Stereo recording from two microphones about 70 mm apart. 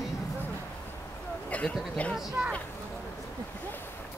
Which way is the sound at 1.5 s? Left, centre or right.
Left.